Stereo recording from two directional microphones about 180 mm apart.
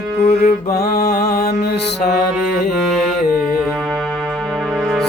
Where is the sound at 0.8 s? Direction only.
60° left (ahead or behind).